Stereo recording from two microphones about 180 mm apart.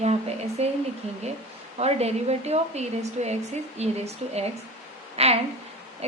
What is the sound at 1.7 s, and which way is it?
A woman's voice, 35° right (ahead or behind).